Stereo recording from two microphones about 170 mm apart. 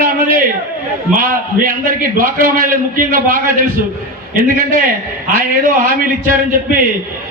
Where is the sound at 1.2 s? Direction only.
55° right (ahead or behind).